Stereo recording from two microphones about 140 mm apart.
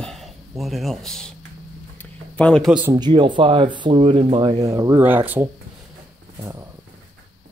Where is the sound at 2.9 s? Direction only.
30° right (ahead or behind).